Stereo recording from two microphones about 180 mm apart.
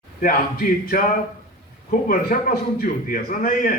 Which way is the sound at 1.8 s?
50° left (ahead or behind).